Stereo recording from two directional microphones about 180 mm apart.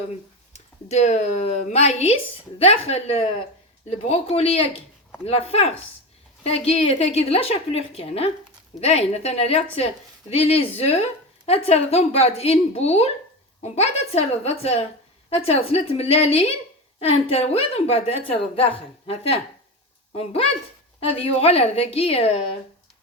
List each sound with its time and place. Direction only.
0.5 s speech: 40° left (ahead or behind)